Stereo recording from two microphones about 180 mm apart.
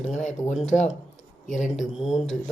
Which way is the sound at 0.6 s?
40° left (ahead or behind).